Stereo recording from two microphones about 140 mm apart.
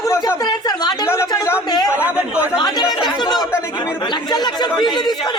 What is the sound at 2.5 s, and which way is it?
Speech, 30° left (ahead or behind).